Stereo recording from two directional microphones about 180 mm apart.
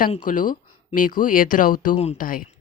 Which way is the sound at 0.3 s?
45° left (ahead or behind).